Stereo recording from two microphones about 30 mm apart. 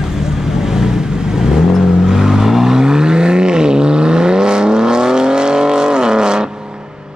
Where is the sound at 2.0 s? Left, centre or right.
Right.